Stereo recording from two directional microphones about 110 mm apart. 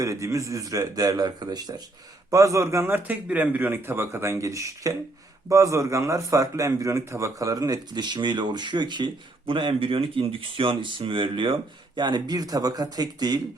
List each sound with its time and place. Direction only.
0.0 s a man's voice: 30° right (ahead or behind)